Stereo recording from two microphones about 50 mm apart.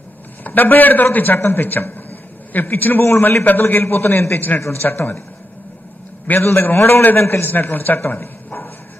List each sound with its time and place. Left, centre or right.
0.4 s a man's voice: left
3.8 s a man's voice: left
6.2 s a man's voice: left
6.5 s a man's voice: left